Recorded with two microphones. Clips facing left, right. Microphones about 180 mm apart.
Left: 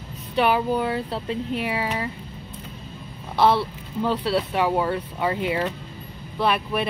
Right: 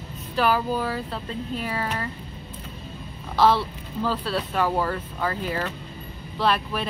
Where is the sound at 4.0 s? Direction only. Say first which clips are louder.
Left 3 dB; 20° left (ahead or behind).